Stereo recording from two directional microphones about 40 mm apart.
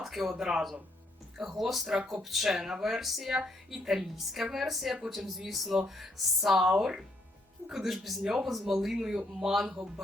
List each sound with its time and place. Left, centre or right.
0.0 s speech: centre
8.2 s speech: centre
8.4 s speech: centre